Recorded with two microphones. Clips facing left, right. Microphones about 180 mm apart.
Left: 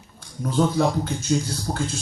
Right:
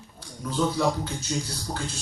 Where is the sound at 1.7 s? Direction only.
65° left (ahead or behind).